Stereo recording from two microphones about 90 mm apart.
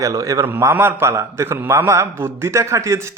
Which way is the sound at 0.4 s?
25° right (ahead or behind).